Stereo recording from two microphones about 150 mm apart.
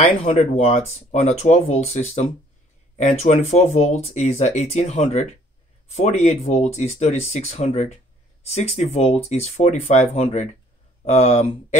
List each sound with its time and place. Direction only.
0.2 s speech: 45° left (ahead or behind)